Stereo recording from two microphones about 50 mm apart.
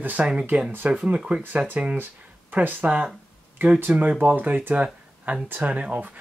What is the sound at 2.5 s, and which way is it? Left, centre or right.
Speech, right.